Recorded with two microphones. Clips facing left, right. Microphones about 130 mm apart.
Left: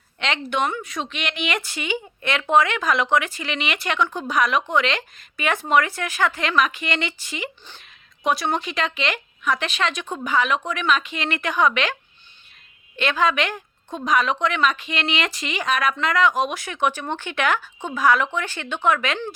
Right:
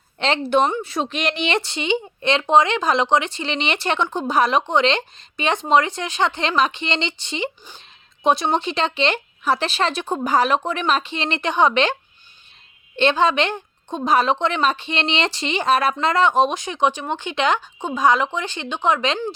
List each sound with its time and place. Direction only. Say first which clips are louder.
0.2 s a woman's voice: right 6 dB; 30° right (ahead or behind)
13.0 s a woman's voice: right 4 dB; 30° right (ahead or behind)